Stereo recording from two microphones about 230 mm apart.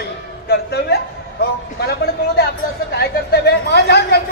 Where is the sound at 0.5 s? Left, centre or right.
Left.